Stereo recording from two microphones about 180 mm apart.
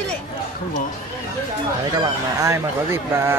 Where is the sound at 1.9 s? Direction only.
20° right (ahead or behind).